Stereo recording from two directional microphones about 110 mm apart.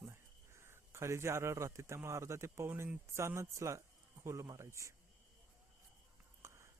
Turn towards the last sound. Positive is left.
turn(degrees=-25)  # may be behind; listen again after turning